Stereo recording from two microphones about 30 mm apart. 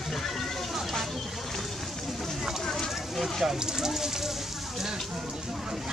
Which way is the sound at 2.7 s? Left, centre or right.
Centre.